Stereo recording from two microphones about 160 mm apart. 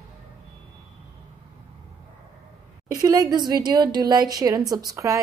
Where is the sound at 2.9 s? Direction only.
25° right (ahead or behind).